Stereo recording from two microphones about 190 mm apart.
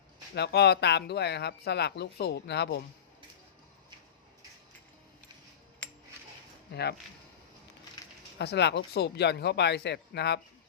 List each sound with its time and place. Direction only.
0.3 s speech: 60° left (ahead or behind)
5.8 s a sound: 5° left (ahead or behind)
6.7 s speech: 60° left (ahead or behind)
8.4 s speech: 65° left (ahead or behind)